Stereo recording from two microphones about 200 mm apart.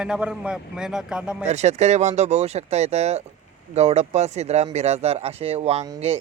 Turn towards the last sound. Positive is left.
turn(degrees=-30)  # may be behind; listen again after turning